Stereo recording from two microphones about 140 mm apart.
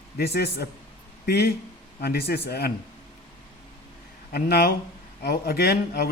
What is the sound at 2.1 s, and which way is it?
Speech, 90° left.